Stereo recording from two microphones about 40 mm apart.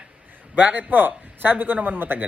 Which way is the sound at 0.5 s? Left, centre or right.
Right.